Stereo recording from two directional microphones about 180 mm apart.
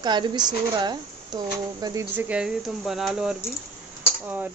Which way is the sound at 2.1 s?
5° right (ahead or behind).